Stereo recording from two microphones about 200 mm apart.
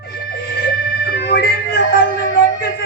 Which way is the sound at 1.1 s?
55° left (ahead or behind).